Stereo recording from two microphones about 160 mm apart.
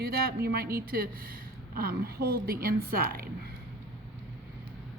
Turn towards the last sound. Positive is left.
turn(degrees=-65)  # may be behind; listen again after turning